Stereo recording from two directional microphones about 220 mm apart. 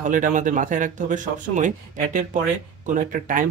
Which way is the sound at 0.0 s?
35° right (ahead or behind).